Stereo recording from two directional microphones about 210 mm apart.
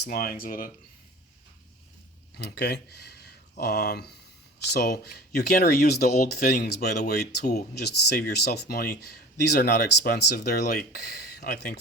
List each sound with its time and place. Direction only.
0.0 s speech: 45° left (ahead or behind)
2.4 s speech: 55° left (ahead or behind)